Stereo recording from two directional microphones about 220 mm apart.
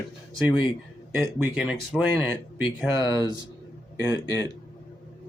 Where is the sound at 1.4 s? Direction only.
5° right (ahead or behind).